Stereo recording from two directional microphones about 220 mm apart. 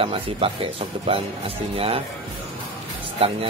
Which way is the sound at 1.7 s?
25° right (ahead or behind).